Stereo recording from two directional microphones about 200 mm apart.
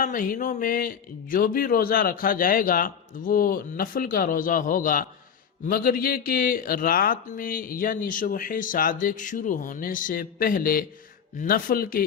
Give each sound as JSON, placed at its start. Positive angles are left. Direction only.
{"t": 0.0, "sound": "speech", "side_deg": 40}